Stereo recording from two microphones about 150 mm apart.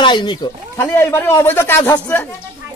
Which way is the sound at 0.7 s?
15° left (ahead or behind).